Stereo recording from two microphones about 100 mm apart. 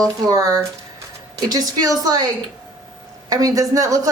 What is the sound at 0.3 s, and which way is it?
Speech, 35° right (ahead or behind).